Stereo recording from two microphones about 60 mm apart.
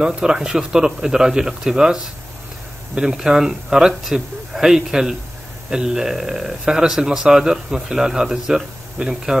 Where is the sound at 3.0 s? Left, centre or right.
Centre.